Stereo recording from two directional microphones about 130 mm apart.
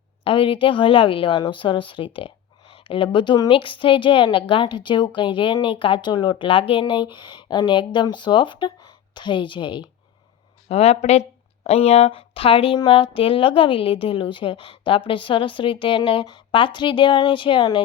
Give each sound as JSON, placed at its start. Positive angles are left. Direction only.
{"t": 0.3, "sound": "a woman's voice", "side_deg": 45}
{"t": 10.7, "sound": "a woman's voice", "side_deg": 55}